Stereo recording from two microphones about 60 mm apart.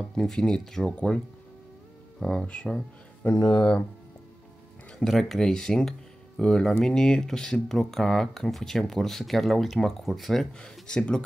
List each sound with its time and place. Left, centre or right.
0.0 s speech: centre
2.1 s speech: centre
2.4 s speech: centre
3.3 s speech: centre
4.9 s speech: centre